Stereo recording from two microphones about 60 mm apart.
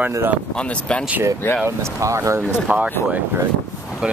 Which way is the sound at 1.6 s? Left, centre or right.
Right.